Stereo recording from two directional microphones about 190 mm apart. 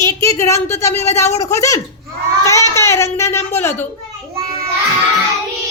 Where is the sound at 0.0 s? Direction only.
15° left (ahead or behind).